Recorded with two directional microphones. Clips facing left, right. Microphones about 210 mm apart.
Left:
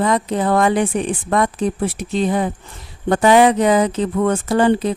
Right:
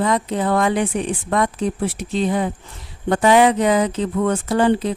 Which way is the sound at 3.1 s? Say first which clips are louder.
Left 2 dB; 45° left (ahead or behind).